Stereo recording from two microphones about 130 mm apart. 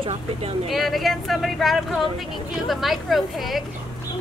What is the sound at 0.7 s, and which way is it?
Speech, centre (ahead or behind).